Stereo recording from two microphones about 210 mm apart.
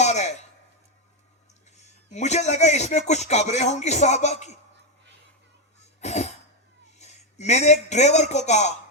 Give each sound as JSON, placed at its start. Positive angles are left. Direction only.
{"t": 0.0, "sound": "a sound", "side_deg": 35}
{"t": 1.7, "sound": "a man's voice", "side_deg": 35}
{"t": 6.0, "sound": "cough", "side_deg": 30}
{"t": 7.0, "sound": "a man's voice", "side_deg": 35}